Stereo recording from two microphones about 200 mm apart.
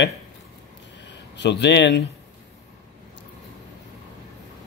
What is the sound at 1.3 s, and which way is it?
Speech, 60° left (ahead or behind).